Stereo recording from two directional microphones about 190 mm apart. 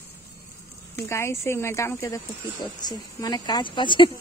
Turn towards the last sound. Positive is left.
turn(degrees=25)  # may be behind; listen again after turning